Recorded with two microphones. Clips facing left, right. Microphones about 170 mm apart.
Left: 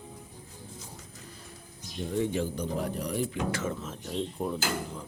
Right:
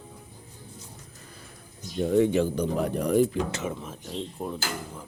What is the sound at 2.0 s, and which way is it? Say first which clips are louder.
Speech: right 8 dB; 70° right (ahead or behind).